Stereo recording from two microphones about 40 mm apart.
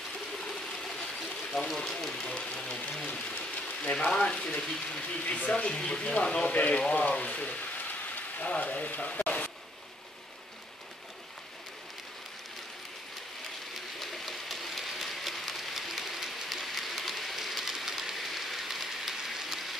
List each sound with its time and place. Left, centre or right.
0.3 s ratchet: centre
1.9 s speech: centre
2.2 s speech: centre
3.3 s a sound: left
3.9 s speech: centre
5.1 s speech: left
5.7 s speech: centre
6.5 s speech: left
13.9 s rain: centre